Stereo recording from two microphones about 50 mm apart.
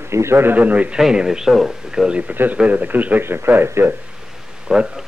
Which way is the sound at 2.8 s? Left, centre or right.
Right.